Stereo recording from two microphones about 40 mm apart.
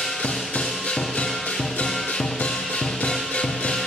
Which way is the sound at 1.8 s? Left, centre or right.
Centre.